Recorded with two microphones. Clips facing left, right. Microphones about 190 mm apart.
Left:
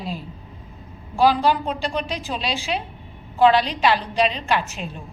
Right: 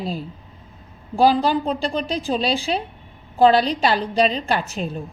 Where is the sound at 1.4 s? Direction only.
35° right (ahead or behind).